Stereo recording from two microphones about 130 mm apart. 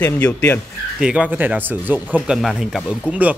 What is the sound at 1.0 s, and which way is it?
A man's voice, 10° right (ahead or behind).